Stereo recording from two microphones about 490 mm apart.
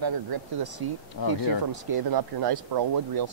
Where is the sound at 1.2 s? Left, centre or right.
Left.